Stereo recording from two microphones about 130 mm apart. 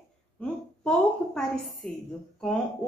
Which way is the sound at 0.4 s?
5° left (ahead or behind).